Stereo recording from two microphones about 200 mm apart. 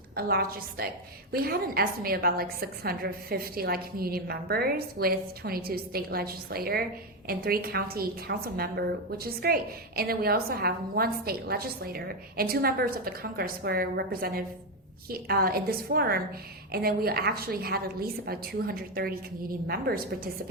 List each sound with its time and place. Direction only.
0.2 s a woman's voice: 50° right (ahead or behind)